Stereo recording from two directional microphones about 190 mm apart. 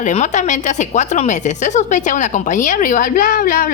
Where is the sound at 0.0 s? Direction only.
40° left (ahead or behind).